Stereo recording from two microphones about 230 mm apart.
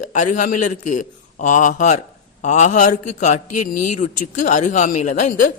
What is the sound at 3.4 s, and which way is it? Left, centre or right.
Speech, left.